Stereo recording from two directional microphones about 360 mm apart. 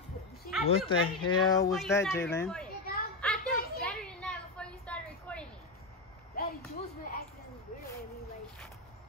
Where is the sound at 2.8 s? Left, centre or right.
Left.